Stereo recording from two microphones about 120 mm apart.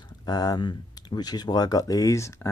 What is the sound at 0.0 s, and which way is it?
Speech, 35° left (ahead or behind).